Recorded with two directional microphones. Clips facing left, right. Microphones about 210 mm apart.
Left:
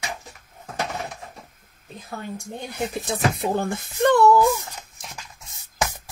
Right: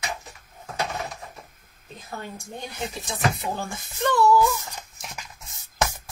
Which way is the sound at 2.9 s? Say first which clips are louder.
Left 2 dB; 60° left (ahead or behind).